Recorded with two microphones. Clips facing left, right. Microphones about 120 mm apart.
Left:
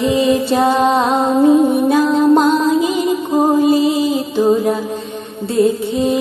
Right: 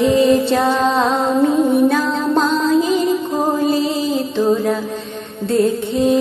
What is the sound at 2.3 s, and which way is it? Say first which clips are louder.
Music: left 2 dB; 15° left (ahead or behind).